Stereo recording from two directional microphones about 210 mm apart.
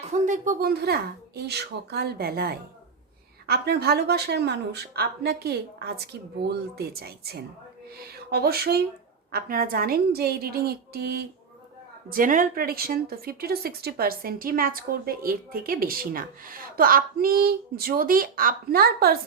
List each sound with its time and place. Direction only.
0.0 s a woman's voice: 35° right (ahead or behind)